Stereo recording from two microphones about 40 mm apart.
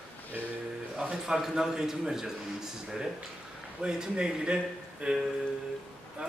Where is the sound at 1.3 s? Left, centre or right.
Centre.